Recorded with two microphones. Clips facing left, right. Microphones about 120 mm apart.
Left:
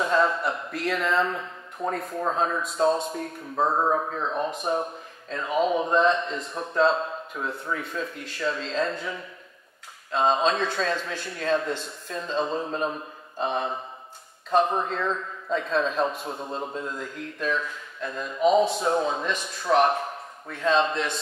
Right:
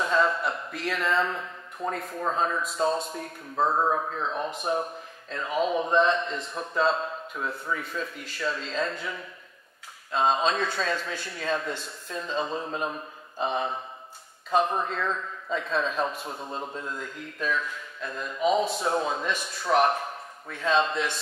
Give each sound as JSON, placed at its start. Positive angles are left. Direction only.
{"t": 0.0, "sound": "a man's voice", "side_deg": 0}
{"t": 11.1, "sound": "a man's voice", "side_deg": -5}